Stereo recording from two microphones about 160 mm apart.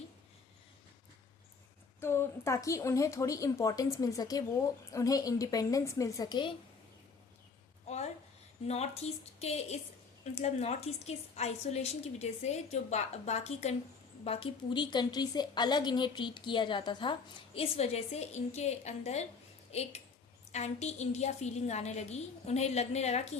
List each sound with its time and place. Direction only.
2.0 s a woman's voice: 15° left (ahead or behind)
7.9 s a sound: 45° left (ahead or behind)
8.6 s a woman's voice: 40° left (ahead or behind)